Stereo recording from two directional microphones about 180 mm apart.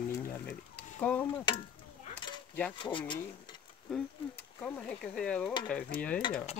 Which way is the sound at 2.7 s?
25° left (ahead or behind).